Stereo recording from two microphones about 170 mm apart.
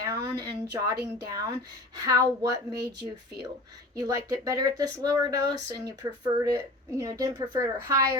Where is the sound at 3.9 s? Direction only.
20° right (ahead or behind).